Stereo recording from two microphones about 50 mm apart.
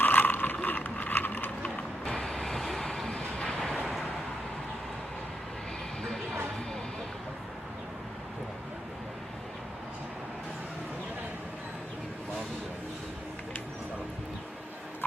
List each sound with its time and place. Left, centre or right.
0.0 s ratchet: left
0.6 s a sound: left
2.0 s vehicle: centre